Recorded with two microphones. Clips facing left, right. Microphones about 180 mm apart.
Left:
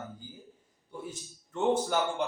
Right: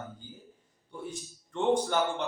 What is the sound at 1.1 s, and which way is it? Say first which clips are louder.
Speech: right 2 dB; 5° left (ahead or behind).